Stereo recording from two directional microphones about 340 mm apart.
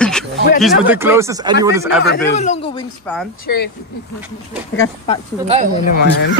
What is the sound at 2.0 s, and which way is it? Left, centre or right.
Speech, left.